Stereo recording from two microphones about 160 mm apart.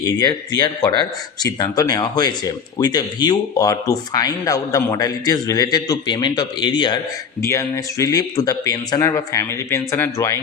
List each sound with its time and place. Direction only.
0.0 s speech: 20° left (ahead or behind)